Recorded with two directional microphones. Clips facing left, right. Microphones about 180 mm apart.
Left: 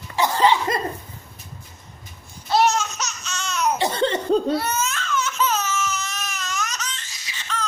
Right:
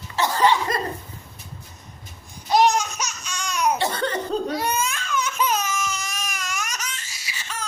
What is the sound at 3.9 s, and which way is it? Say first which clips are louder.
Cough: left 5 dB; 30° left (ahead or behind).